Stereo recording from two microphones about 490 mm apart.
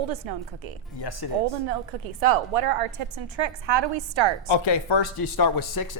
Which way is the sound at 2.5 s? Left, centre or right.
Right.